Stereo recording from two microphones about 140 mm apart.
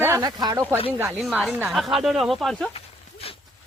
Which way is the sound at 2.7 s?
45° left (ahead or behind).